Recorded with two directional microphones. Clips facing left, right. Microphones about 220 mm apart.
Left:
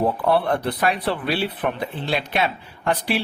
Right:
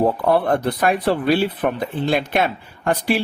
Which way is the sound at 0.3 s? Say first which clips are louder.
Right 3 dB; 45° right (ahead or behind).